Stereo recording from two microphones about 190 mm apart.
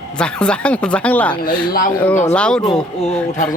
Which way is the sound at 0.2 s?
5° left (ahead or behind).